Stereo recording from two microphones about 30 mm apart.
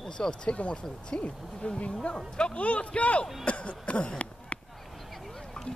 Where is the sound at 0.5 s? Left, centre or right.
Left.